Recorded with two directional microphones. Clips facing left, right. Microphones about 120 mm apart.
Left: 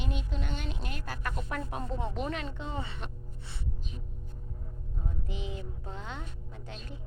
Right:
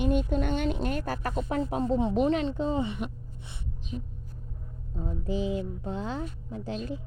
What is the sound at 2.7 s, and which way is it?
Music, 20° right (ahead or behind).